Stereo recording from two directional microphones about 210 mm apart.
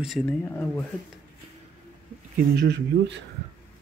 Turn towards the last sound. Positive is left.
turn(degrees=-55)  # may be behind; listen again after turning